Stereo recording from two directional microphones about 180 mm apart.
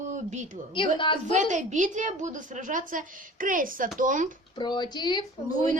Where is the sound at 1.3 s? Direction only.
40° right (ahead or behind).